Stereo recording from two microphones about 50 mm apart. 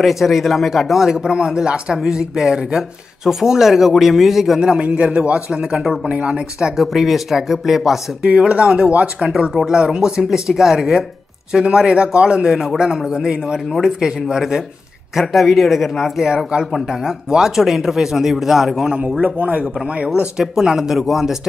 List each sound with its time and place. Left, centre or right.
0.0 s speech: centre
1.1 s a man's voice: centre
4.6 s a man's voice: centre
6.0 s a man's voice: right
6.6 s speech: centre
8.3 s a man's voice: centre
9.3 s a man's voice: centre
19.1 s a man's voice: right
20.3 s speech: centre